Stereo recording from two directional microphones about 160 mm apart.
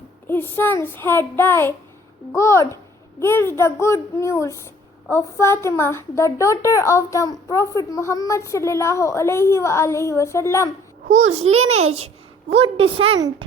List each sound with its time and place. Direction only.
0.3 s speech: 15° left (ahead or behind)
11.3 s a woman's voice: 40° right (ahead or behind)